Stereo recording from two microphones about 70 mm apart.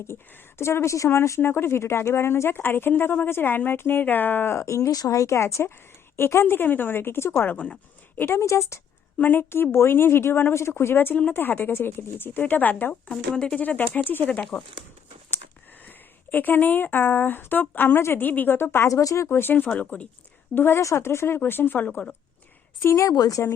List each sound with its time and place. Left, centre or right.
0.1 s speech: left
4.5 s speech: left
4.9 s speech: left
8.2 s speech: left
9.1 s speech: left
13.1 s speech: centre
13.6 s speech: left
15.8 s a woman's voice: left
18.9 s speech: left; by 20.1 s centre
20.6 s speech: left
22.8 s speech: left
23.1 s speech: left